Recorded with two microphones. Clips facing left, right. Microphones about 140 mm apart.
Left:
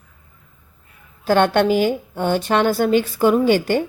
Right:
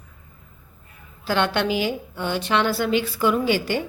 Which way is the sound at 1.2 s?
50° left (ahead or behind).